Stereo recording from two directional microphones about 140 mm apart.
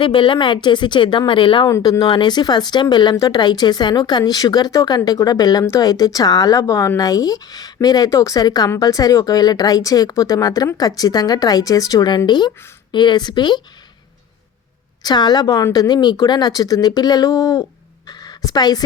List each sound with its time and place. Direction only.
0.0 s a woman's voice: 35° left (ahead or behind)
15.0 s a woman's voice: 30° left (ahead or behind)
18.0 s a sound: 30° left (ahead or behind)